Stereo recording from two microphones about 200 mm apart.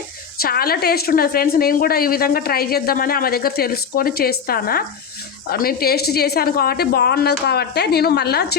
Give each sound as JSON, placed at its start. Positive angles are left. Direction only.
{"t": 0.3, "sound": "a woman's voice", "side_deg": 50}